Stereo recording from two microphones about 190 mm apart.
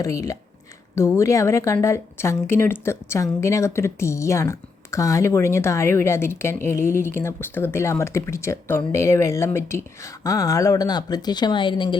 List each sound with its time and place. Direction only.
0.0 s a woman's voice: 15° left (ahead or behind)